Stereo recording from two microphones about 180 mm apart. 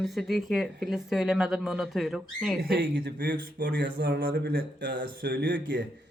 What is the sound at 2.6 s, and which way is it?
Speech, 60° right (ahead or behind).